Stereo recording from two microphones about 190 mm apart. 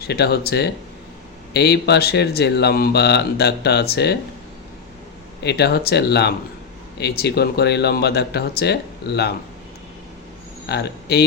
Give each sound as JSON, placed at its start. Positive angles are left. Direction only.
{"t": 0.0, "sound": "speech", "side_deg": 55}
{"t": 5.4, "sound": "speech", "side_deg": 60}
{"t": 10.7, "sound": "speech", "side_deg": 60}